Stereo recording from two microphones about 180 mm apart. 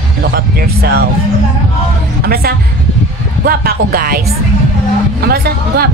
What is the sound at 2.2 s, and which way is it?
Speech, 60° right (ahead or behind).